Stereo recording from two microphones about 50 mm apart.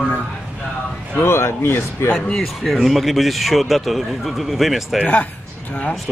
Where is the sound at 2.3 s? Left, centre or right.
Centre.